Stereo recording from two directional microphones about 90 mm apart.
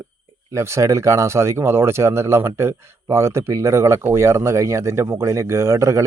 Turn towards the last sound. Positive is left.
turn(degrees=-35)  # may be behind; listen again after turning